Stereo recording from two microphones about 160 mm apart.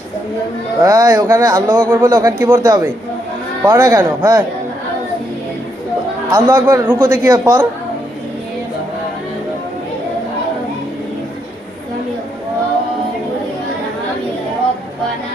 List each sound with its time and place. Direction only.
0.8 s a man's voice: 20° right (ahead or behind)
6.3 s a man's voice: 20° right (ahead or behind)